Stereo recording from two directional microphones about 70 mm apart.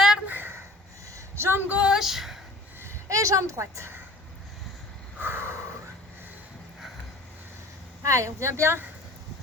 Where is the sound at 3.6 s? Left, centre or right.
Right.